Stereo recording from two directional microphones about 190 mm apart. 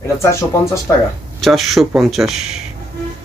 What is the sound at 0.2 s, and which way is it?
Speech, 15° left (ahead or behind).